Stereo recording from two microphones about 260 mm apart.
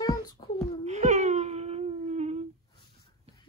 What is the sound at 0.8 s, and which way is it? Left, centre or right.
Whimper, right.